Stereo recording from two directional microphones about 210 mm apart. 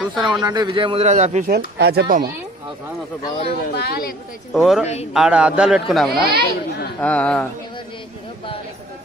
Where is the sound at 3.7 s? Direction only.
50° left (ahead or behind).